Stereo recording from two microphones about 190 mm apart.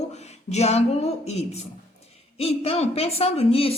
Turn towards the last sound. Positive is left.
turn(degrees=30)  # may be behind; listen again after turning